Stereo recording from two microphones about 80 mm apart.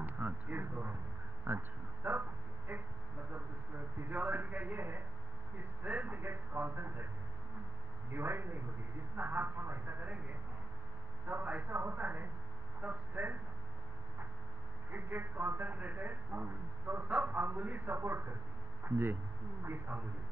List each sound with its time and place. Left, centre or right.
0.0 s a sound: right
1.5 s a man's voice: right
2.7 s a sound: right
4.1 s a sound: right
8.1 s a man's voice: right
9.1 s radio: right
10.0 s music: centre
11.2 s a man's voice: right
14.9 s a man's voice: right
19.9 s a man's voice: centre